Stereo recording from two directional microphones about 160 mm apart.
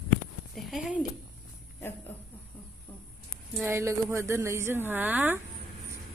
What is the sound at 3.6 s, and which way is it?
A woman's voice, 15° right (ahead or behind).